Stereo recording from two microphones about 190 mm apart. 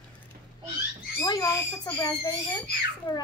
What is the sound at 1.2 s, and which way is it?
Speech, 20° left (ahead or behind).